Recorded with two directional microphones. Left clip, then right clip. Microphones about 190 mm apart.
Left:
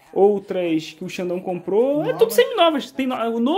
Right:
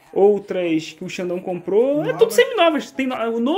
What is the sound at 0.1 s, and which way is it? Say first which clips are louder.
Speech: right 1 dB; 5° left (ahead or behind).